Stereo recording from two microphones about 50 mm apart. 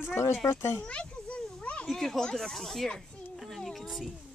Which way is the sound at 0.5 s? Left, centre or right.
Left.